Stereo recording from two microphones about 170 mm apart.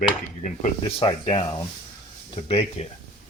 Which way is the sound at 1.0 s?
30° left (ahead or behind).